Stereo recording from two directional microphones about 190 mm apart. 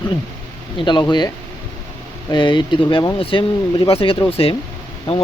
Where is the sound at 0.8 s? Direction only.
25° left (ahead or behind).